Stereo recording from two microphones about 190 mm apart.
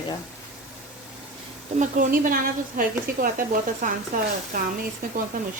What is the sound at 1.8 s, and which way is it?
Speech, 45° right (ahead or behind).